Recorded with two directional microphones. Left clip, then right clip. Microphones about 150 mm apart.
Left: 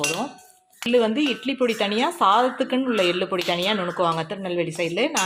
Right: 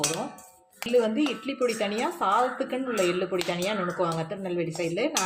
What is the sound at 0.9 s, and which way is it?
Speech, 40° left (ahead or behind).